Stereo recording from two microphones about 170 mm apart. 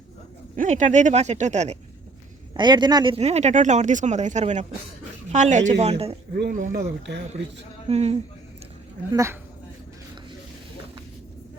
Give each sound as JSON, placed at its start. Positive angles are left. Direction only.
{"t": 0.5, "sound": "speech", "side_deg": -50}
{"t": 2.5, "sound": "speech", "side_deg": -25}
{"t": 3.2, "sound": "speech", "side_deg": -40}
{"t": 6.5, "sound": "speech", "side_deg": -50}
{"t": 7.9, "sound": "speech", "side_deg": -40}
{"t": 9.1, "sound": "speech", "side_deg": -15}